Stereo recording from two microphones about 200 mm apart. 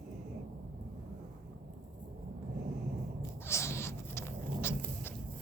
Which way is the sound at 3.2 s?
15° left (ahead or behind).